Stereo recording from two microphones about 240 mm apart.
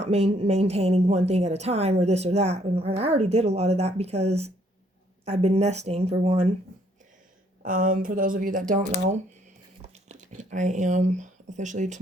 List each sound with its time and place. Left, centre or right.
0.0 s a woman's voice: right
7.6 s speech: right
9.8 s a sound: right